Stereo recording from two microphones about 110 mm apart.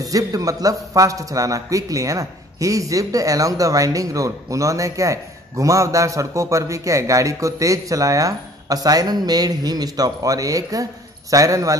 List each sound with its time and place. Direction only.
0.0 s speech: 30° right (ahead or behind)